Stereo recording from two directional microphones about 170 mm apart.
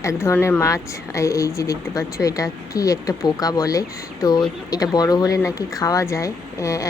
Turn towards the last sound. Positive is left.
turn(degrees=20)  # may be behind; listen again after turning